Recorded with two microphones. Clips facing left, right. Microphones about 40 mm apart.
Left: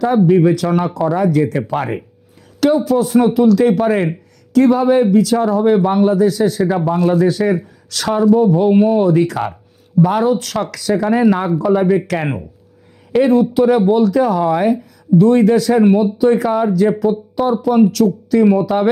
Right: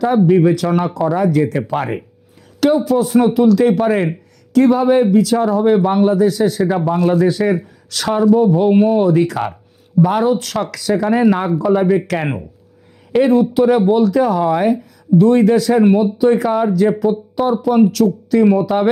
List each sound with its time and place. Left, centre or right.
0.0 s a man's voice: centre
6.9 s speech: right
7.4 s a man's voice: centre